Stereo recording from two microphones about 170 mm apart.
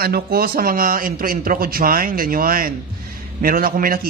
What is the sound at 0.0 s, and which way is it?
Speech, 65° right (ahead or behind).